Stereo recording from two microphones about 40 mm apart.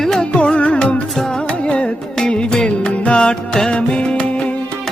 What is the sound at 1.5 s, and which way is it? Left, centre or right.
Music, left.